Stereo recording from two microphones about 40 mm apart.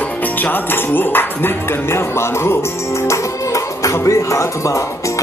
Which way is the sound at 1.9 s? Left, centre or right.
Left.